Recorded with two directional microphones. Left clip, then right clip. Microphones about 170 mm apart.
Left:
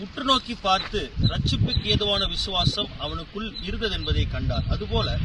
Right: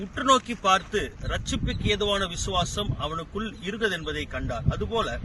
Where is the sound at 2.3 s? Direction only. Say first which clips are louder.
Left 3 dB; centre (ahead or behind).